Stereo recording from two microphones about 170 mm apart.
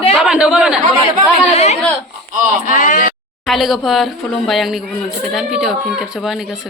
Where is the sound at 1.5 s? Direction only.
40° left (ahead or behind).